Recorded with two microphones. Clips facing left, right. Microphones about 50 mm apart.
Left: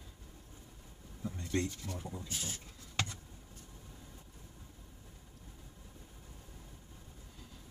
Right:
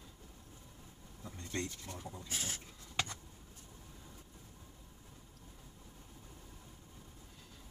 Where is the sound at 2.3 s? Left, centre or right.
Right.